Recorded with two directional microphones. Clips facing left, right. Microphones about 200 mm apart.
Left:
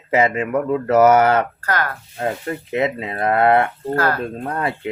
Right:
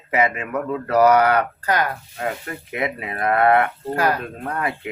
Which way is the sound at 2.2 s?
30° left (ahead or behind).